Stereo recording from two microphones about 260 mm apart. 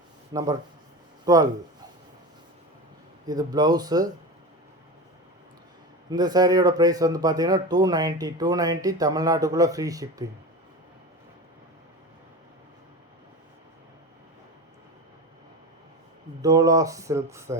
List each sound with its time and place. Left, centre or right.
0.3 s speech: centre
3.2 s speech: centre
6.1 s speech: centre
16.4 s speech: centre